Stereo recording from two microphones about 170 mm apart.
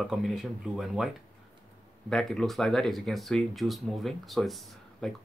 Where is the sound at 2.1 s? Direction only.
Centre (ahead or behind).